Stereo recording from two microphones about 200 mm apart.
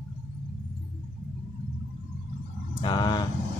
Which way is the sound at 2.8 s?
20° left (ahead or behind).